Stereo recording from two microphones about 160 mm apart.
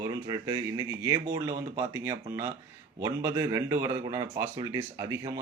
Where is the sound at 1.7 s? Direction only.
15° right (ahead or behind).